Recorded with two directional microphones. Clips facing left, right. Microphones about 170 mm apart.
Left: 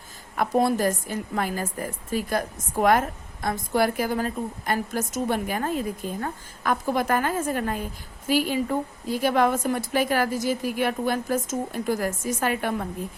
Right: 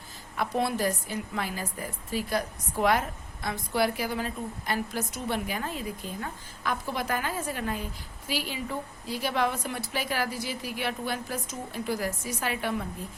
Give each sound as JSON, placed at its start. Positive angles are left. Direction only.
{"t": 0.3, "sound": "a woman's voice", "side_deg": 45}